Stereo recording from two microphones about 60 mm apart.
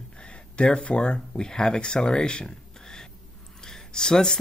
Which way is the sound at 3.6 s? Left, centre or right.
Centre.